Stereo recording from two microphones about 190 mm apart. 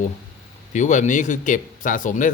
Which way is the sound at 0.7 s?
40° left (ahead or behind).